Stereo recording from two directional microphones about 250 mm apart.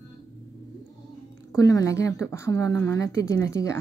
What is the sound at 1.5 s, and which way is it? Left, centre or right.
Speech, centre.